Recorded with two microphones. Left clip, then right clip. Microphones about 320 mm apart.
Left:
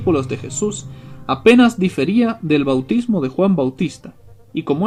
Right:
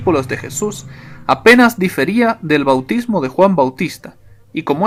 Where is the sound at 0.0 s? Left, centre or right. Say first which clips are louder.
Right 3 dB; right.